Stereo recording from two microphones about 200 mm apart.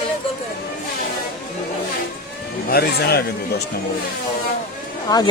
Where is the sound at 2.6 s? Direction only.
50° left (ahead or behind).